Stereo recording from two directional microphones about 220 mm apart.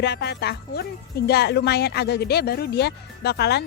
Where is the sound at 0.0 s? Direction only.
50° left (ahead or behind).